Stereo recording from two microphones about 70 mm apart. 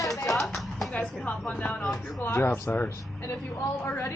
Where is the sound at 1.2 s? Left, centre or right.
Left.